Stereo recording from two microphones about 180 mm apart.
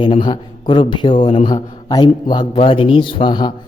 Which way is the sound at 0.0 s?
25° left (ahead or behind).